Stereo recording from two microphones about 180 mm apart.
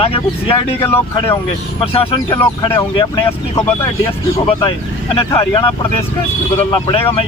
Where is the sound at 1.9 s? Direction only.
30° left (ahead or behind).